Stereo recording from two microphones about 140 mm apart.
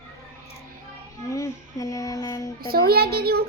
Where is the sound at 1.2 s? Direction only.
25° left (ahead or behind).